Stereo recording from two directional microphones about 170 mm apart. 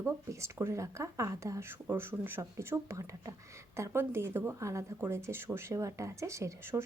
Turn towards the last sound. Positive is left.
turn(degrees=-15)  # may be behind; listen again after turning